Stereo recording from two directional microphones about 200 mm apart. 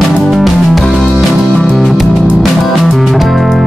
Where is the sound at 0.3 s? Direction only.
Centre (ahead or behind).